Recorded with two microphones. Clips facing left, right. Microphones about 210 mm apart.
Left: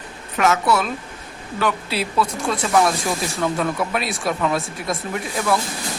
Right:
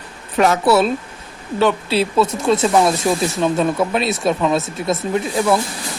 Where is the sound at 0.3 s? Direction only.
30° right (ahead or behind).